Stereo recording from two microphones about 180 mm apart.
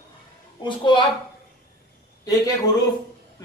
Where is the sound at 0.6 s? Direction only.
25° left (ahead or behind).